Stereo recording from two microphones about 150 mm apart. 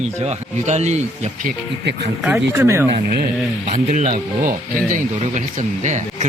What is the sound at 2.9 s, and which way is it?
Speech, 90° right.